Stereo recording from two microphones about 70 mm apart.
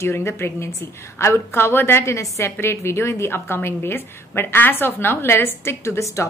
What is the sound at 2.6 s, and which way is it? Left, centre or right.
A woman's voice, left.